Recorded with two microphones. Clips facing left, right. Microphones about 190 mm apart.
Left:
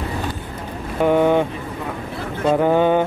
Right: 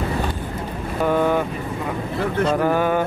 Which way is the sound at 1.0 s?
20° left (ahead or behind).